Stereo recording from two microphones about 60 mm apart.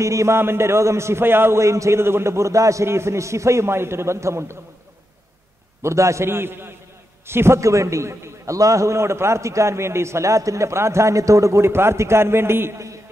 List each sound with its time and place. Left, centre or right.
0.0 s a man's voice: right
0.4 s a man's voice: right
5.8 s a man's voice: right
11.6 s a man's voice: right